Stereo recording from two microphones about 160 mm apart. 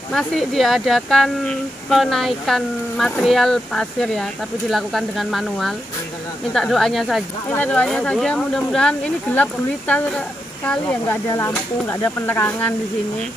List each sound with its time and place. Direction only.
0.1 s speech: 5° left (ahead or behind)